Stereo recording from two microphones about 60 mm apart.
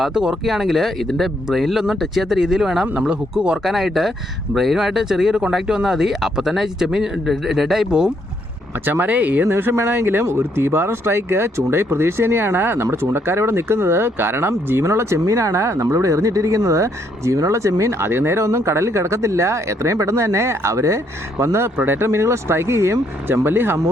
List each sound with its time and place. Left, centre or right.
0.0 s speech: centre
2.8 s speech: right
3.6 s speech: centre
8.8 s speech: right
9.5 s speech: right
15.2 s speech: right
15.8 s speech: right
21.8 s speech: right
22.1 s speech: right